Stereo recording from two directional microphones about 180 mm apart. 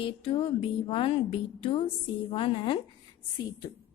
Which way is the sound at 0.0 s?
30° left (ahead or behind).